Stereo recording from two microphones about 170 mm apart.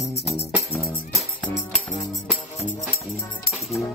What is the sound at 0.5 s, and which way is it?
Music, 5° right (ahead or behind).